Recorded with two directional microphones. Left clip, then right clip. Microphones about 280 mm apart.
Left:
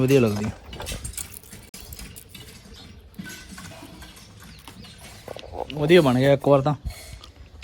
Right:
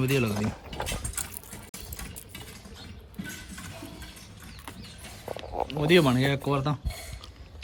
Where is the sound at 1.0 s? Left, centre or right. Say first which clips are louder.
Right 1 dB; right.